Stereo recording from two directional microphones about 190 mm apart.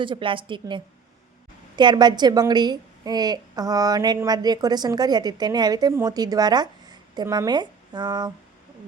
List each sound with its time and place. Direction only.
0.0 s a woman's voice: 25° right (ahead or behind)